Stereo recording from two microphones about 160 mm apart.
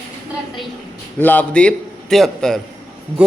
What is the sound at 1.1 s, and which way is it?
A man's voice, 10° left (ahead or behind).